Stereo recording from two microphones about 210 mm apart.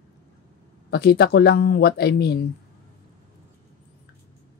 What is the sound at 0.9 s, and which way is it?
Speech, 50° left (ahead or behind).